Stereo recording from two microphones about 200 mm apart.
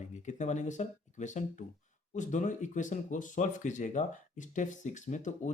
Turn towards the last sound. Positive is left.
turn(degrees=40)  # may be behind; listen again after turning